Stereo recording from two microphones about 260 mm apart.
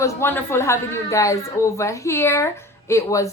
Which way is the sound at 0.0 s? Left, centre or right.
Centre.